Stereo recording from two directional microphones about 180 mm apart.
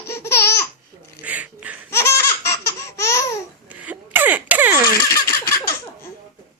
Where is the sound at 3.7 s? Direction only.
10° right (ahead or behind).